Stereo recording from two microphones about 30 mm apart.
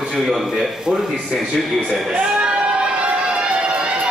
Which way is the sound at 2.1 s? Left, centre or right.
Right.